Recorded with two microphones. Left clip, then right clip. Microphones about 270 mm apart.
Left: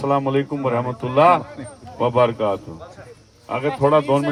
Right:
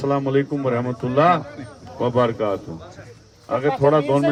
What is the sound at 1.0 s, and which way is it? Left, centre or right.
Speech, left.